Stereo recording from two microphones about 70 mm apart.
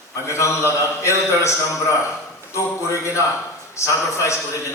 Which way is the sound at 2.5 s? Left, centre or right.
Left.